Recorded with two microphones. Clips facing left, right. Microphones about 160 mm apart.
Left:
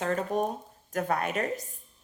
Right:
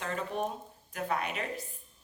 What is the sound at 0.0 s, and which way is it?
Speech, 45° left (ahead or behind).